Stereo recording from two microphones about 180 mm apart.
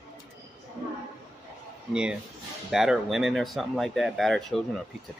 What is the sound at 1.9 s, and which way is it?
Speech, 5° right (ahead or behind).